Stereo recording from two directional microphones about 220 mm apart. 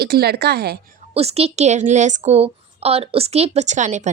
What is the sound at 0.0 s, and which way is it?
Speech, 45° right (ahead or behind).